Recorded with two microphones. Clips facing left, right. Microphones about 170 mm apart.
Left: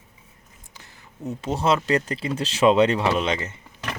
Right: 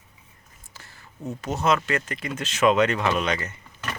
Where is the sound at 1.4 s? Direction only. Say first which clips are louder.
Left 1 dB; 30° left (ahead or behind).